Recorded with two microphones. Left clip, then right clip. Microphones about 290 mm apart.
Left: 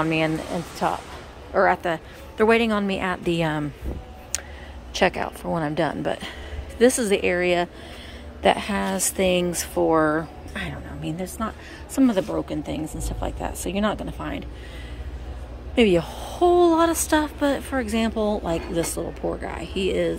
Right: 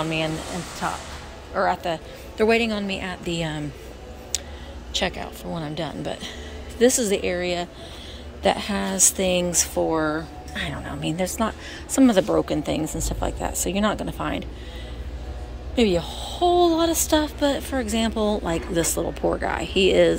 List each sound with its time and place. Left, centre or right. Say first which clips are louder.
0.0 s speech: left 3 dB; centre
4.3 s a sound: right 1 dB; centre
4.9 s speech: left 4 dB; centre
15.7 s speech: left 2 dB; centre